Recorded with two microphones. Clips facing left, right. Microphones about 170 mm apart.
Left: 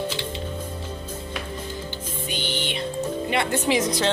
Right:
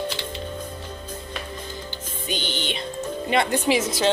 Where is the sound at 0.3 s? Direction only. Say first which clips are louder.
Left 1 dB; 5° left (ahead or behind).